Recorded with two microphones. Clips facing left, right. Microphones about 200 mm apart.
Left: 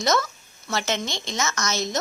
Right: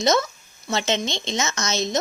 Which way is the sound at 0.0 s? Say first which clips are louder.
Right 3 dB; 20° right (ahead or behind).